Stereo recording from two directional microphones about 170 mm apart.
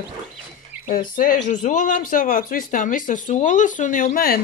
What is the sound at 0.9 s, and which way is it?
Speech, 55° left (ahead or behind).